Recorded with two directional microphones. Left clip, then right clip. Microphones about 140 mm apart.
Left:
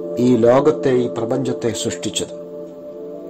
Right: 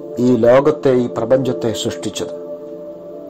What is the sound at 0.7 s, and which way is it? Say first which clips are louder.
Speech: right 2 dB; 15° right (ahead or behind).